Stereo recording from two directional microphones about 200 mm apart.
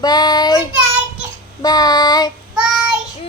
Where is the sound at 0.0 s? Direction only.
20° left (ahead or behind).